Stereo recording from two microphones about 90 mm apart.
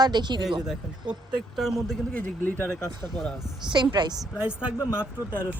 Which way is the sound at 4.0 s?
60° right (ahead or behind).